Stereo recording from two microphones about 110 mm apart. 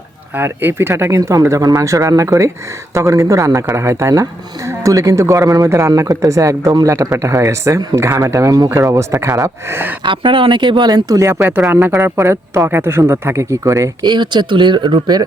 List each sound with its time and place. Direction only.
0.3 s speech: 20° right (ahead or behind)
10.0 s speech: 50° right (ahead or behind); by 13.9 s 25° right (ahead or behind)
14.0 s speech: 40° right (ahead or behind)